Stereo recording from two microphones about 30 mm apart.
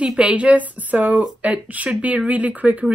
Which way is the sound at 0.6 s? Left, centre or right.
Right.